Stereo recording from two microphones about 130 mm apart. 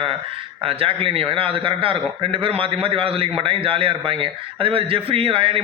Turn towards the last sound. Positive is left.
turn(degrees=-45)  # may be behind; listen again after turning